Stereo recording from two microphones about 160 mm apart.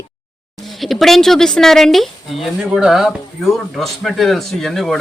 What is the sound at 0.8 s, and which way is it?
Speech, centre (ahead or behind).